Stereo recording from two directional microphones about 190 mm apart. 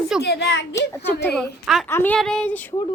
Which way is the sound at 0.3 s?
65° left (ahead or behind).